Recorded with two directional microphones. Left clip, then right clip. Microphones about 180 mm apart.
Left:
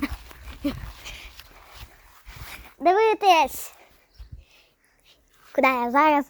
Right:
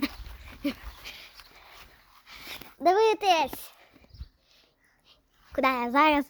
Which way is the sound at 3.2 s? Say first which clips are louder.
Left 6 dB; 35° left (ahead or behind).